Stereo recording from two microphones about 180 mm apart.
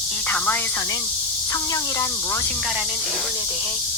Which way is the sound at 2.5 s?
Centre (ahead or behind).